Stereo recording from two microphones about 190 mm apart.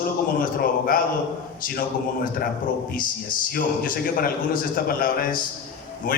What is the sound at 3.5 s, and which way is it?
A man's voice, 45° left (ahead or behind).